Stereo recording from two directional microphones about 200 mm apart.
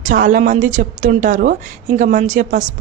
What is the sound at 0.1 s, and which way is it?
A woman's voice, 40° right (ahead or behind).